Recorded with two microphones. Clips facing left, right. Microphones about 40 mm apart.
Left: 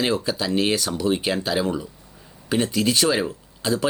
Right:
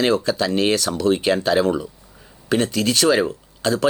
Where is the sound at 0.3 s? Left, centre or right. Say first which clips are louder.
Right 4 dB; right.